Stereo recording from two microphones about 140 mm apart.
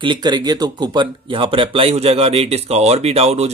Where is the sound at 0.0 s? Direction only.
35° right (ahead or behind).